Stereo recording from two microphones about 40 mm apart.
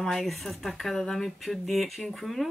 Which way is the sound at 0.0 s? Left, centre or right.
Centre.